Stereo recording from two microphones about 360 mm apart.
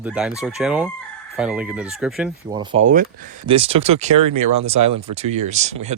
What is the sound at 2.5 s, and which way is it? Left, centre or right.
Speech, centre.